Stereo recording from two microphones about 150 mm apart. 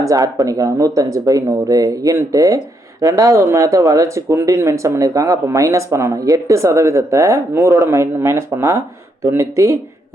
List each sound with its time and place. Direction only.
0.0 s speech: 20° right (ahead or behind)